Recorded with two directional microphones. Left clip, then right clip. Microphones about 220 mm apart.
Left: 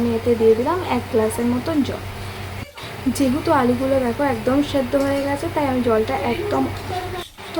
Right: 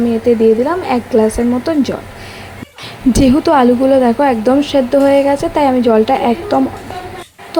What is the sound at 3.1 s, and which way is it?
A woman's voice, 35° right (ahead or behind).